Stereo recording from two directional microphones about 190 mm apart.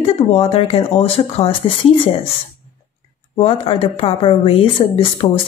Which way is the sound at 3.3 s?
30° left (ahead or behind).